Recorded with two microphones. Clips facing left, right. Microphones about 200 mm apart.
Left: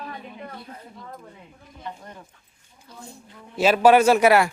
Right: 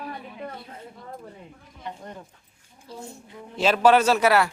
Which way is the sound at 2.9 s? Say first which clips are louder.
Right 6 dB; 30° right (ahead or behind).